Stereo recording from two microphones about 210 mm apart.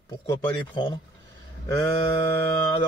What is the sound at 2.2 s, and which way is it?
Speech, 10° left (ahead or behind).